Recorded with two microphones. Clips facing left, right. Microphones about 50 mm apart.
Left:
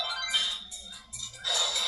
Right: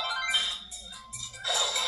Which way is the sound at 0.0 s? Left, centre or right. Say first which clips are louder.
Right 2 dB; centre.